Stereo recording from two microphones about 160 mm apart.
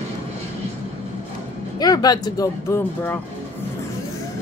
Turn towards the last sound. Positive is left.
turn(degrees=20)  # may be behind; listen again after turning